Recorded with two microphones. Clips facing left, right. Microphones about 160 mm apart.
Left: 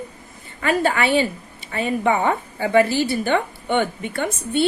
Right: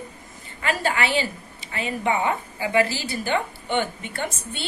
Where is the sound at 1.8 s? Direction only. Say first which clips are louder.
Left 4 dB; 55° left (ahead or behind).